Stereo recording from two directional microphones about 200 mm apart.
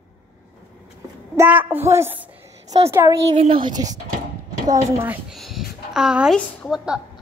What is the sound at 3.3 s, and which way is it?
Speech, 25° right (ahead or behind).